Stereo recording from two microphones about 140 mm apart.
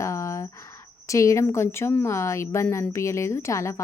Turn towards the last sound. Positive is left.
turn(degrees=20)  # may be behind; listen again after turning